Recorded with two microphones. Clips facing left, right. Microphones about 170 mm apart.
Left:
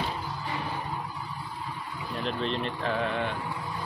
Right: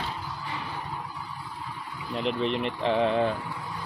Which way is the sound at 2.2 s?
15° right (ahead or behind).